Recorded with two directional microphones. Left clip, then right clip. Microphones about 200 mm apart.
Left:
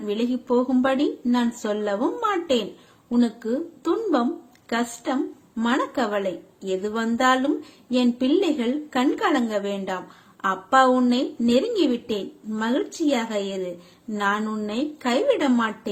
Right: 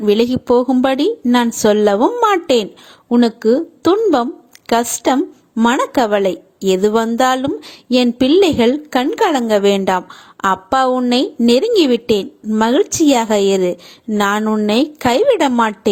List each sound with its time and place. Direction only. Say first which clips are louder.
0.0 s a woman's voice: right 12 dB; 50° right (ahead or behind)